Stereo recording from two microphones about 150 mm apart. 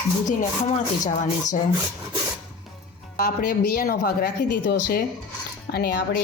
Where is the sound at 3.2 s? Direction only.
90° left.